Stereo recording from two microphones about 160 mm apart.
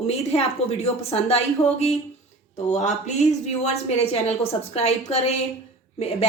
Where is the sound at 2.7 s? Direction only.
45° left (ahead or behind).